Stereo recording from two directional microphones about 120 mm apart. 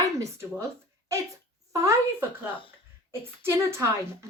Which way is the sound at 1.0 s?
25° right (ahead or behind).